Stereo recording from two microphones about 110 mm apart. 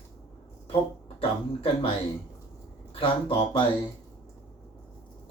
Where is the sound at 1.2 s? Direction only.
55° left (ahead or behind).